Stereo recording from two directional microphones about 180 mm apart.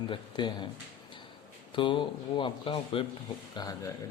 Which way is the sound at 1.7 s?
25° left (ahead or behind).